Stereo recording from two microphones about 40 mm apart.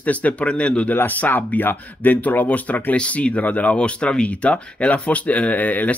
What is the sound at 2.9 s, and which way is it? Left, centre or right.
Speech, left.